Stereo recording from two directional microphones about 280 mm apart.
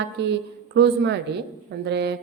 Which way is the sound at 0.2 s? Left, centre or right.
Right.